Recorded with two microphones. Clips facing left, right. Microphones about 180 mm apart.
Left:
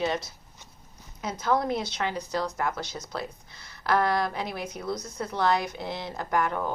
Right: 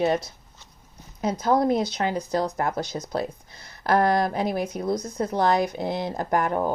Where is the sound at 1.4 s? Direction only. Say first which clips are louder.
Right 5 dB; 40° right (ahead or behind).